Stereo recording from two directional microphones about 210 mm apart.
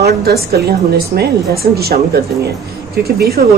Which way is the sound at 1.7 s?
50° right (ahead or behind).